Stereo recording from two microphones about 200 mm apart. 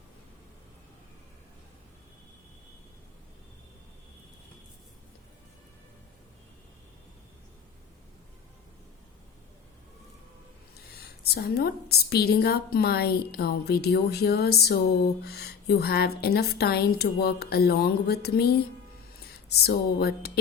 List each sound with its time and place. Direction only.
10.9 s a woman's voice: 50° left (ahead or behind)